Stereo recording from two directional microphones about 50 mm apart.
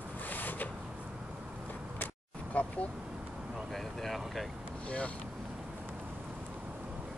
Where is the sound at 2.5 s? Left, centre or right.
Left.